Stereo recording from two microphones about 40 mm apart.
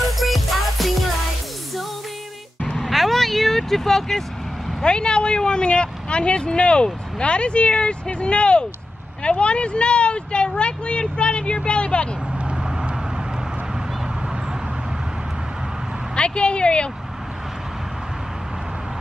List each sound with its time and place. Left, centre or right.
0.2 s music: centre
2.8 s vehicle: centre
4.8 s speech: left
12.4 s vehicle: right
16.2 s speech: left